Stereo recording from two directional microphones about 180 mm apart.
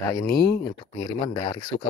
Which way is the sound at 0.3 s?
55° left (ahead or behind).